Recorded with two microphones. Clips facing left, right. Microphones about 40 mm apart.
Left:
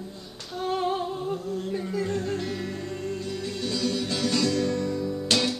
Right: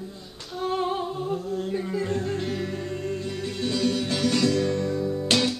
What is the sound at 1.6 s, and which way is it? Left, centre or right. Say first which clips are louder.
Music: right 1 dB; centre.